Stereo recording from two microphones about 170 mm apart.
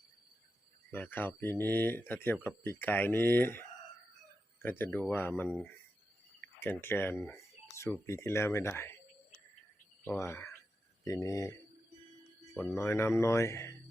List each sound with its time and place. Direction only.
0.9 s speech: 10° left (ahead or behind)
10.0 s speech: 15° left (ahead or behind)
12.7 s speech: 15° left (ahead or behind)